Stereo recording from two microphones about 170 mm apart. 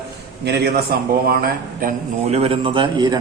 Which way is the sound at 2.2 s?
35° right (ahead or behind).